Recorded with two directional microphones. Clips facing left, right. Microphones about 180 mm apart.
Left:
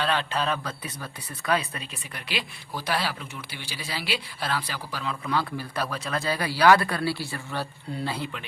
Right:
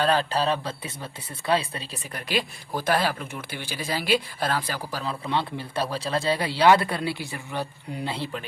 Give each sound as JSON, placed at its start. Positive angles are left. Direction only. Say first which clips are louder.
{"t": 0.0, "sound": "a man's voice", "louder": "right 4 dB", "side_deg": -40}
{"t": 2.1, "sound": "speech", "louder": "right 6 dB", "side_deg": -45}
{"t": 5.2, "sound": "speech", "louder": "left 1 dB", "side_deg": -25}